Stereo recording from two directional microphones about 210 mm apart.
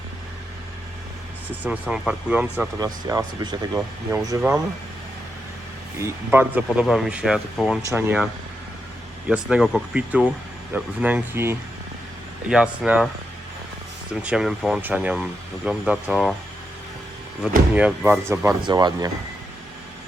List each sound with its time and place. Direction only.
1.6 s speech: 5° right (ahead or behind)
2.7 s speech: 15° right (ahead or behind)
3.8 s speech: 5° right (ahead or behind)
6.0 s speech: 10° right (ahead or behind)
7.8 s speech: 15° right (ahead or behind)
9.3 s speech: 5° right (ahead or behind)
14.1 s speech: 5° right (ahead or behind)
17.7 s speech: 5° right (ahead or behind)